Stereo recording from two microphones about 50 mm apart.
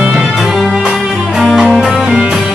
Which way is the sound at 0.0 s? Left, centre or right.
Right.